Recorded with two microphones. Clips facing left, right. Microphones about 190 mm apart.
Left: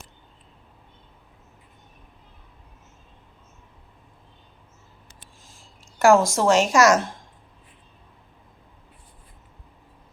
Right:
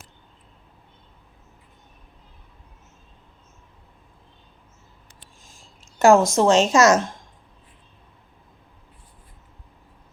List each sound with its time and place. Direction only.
5.8 s a woman's voice: 20° right (ahead or behind)